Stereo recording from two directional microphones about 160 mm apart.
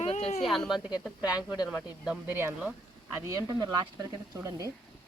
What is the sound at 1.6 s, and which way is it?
Speech, 5° right (ahead or behind).